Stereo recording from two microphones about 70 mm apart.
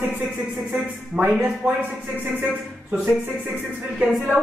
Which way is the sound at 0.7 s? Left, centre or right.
Centre.